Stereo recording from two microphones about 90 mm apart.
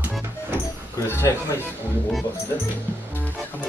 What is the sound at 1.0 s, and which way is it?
Speech, 30° left (ahead or behind).